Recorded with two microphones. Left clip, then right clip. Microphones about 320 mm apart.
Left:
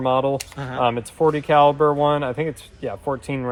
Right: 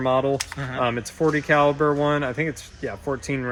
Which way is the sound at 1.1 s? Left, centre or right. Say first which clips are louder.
Left 3 dB; centre.